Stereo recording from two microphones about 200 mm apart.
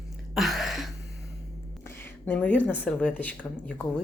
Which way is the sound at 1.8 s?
5° left (ahead or behind).